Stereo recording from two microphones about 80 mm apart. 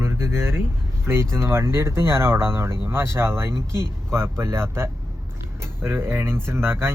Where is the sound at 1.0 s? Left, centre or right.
Right.